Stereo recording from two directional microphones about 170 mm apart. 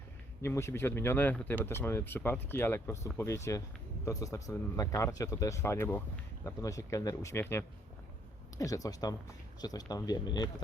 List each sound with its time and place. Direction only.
0.4 s speech: 15° left (ahead or behind)